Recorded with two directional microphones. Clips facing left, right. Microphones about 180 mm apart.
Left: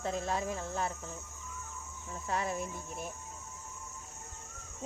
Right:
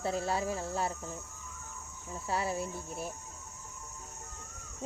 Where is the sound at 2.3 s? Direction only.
30° right (ahead or behind).